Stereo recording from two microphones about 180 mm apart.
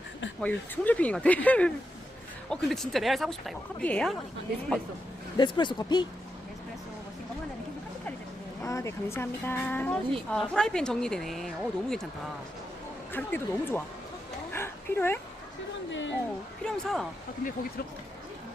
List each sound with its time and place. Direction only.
0.4 s speech: 10° left (ahead or behind)
5.4 s speech: 25° left (ahead or behind)
8.6 s speech: 15° left (ahead or behind)
13.1 s speech: 10° left (ahead or behind)
14.5 s dog: 15° left (ahead or behind)
15.9 s a sound: 90° left
16.6 s speech: 5° left (ahead or behind)